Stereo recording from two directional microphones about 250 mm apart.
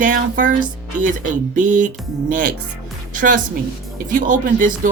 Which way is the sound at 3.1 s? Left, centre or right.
Right.